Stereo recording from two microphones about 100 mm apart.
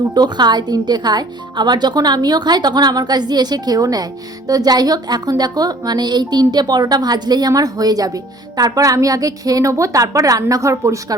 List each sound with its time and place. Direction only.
0.0 s speech: 45° right (ahead or behind)